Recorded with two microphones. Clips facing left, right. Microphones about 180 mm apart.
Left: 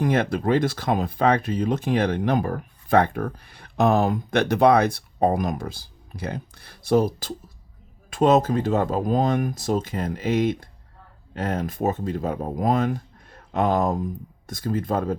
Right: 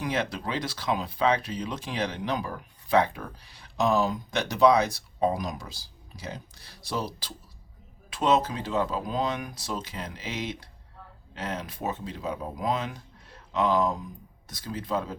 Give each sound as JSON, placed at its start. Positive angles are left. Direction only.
{"t": 0.0, "sound": "speech", "side_deg": 50}